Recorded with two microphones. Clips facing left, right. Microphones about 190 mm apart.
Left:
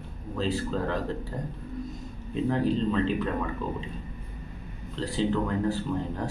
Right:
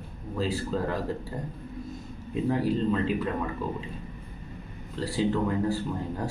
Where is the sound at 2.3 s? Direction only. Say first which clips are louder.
Even; 5° right (ahead or behind).